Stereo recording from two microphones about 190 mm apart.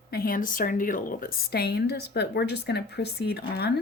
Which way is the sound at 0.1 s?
50° left (ahead or behind).